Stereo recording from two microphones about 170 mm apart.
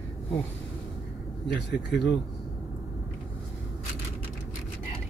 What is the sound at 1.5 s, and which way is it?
Speech, 90° left.